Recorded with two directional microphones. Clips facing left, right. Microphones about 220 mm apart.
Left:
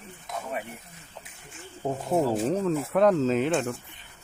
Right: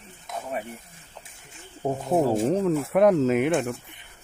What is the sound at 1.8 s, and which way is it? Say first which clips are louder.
Speech: right 2 dB; 20° right (ahead or behind).